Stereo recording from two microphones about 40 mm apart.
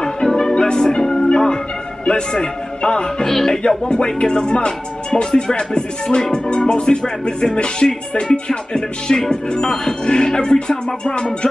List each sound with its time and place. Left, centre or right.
0.0 s music: centre
3.3 s speech: centre
3.6 s music: left